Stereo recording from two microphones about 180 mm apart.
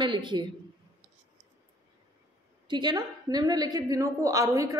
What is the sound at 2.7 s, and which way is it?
A woman's voice, 25° right (ahead or behind).